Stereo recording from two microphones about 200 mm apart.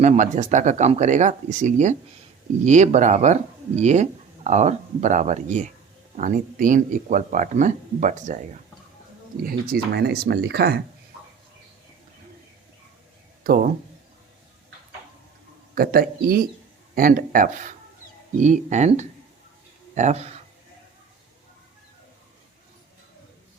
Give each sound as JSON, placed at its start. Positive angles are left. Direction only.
{"t": 0.0, "sound": "speech", "side_deg": -35}
{"t": 9.4, "sound": "speech", "side_deg": -45}
{"t": 13.4, "sound": "speech", "side_deg": -45}
{"t": 15.7, "sound": "speech", "side_deg": -45}